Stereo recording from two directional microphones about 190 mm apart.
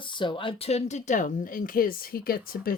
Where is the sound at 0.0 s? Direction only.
25° left (ahead or behind).